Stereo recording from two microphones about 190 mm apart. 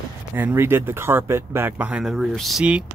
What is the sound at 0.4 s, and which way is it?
Speech, 10° right (ahead or behind).